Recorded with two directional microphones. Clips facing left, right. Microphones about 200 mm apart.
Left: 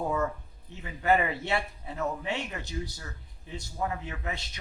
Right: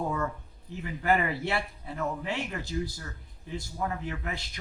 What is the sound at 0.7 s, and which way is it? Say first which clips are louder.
Speech: left 1 dB; 20° left (ahead or behind).